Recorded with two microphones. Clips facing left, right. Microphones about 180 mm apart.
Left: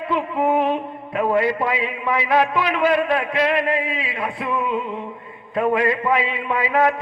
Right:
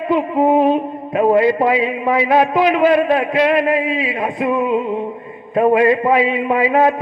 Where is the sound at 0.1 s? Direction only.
30° right (ahead or behind).